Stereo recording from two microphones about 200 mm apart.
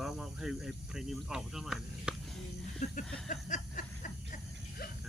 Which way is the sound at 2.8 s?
35° left (ahead or behind).